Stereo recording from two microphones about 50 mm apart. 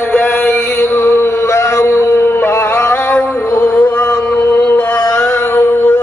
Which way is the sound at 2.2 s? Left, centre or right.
Left.